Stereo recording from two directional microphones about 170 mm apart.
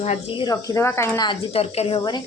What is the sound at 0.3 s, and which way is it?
Speech, 25° left (ahead or behind).